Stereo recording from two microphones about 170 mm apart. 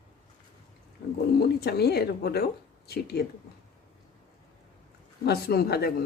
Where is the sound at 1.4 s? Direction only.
70° left (ahead or behind).